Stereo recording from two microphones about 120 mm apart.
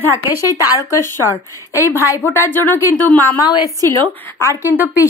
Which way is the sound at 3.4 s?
35° left (ahead or behind).